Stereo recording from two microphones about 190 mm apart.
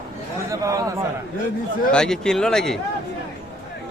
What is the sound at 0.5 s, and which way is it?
Speech, 15° right (ahead or behind).